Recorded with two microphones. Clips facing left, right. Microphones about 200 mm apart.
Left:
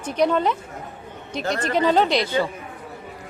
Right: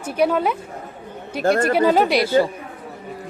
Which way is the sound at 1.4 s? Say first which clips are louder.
Right 8 dB; 50° right (ahead or behind).